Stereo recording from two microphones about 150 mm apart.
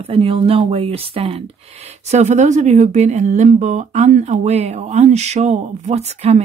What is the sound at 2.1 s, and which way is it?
Speech, 50° right (ahead or behind).